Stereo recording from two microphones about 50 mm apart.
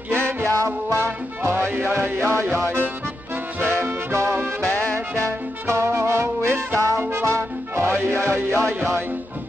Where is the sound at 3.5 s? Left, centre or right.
Right.